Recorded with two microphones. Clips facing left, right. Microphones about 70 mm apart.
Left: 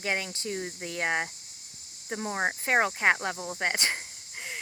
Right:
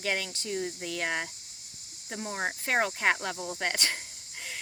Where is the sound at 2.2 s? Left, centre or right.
Left.